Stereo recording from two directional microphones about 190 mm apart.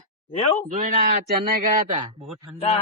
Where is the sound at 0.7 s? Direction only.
45° right (ahead or behind).